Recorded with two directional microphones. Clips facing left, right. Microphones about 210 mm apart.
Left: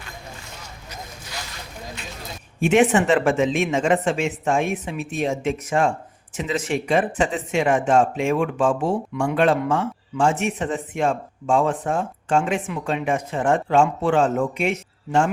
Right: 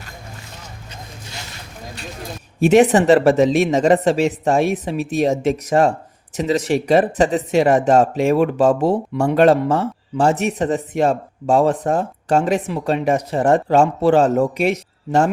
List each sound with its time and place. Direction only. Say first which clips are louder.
2.6 s speech: right 5 dB; 40° right (ahead or behind)